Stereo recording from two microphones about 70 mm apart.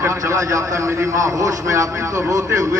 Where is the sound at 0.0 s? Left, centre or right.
Right.